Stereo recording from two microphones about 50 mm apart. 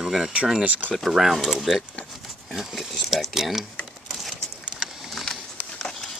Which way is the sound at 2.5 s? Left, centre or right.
Centre.